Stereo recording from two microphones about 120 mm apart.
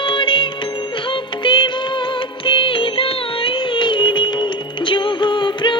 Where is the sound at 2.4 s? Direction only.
45° left (ahead or behind).